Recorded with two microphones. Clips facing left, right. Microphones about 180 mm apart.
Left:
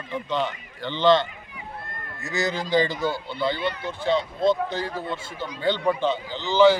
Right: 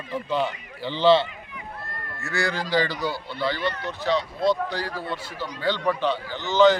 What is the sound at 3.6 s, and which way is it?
Speech, 10° left (ahead or behind).